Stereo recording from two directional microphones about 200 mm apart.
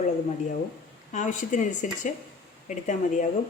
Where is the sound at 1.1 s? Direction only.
40° left (ahead or behind).